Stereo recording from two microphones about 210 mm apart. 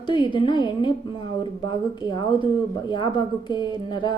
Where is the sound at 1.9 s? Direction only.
20° left (ahead or behind).